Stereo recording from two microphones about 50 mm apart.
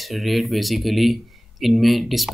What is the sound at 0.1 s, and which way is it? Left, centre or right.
Speech, centre.